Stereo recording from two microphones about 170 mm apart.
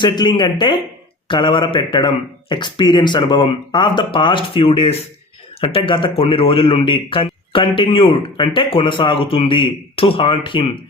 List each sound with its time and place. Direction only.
0.0 s a man's voice: 25° left (ahead or behind)